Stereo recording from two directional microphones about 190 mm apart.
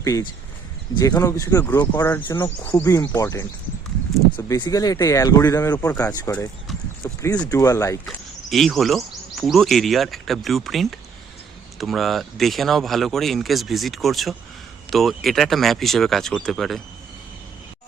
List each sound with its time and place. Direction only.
0.0 s speech: 15° left (ahead or behind)
8.0 s speech: centre (ahead or behind)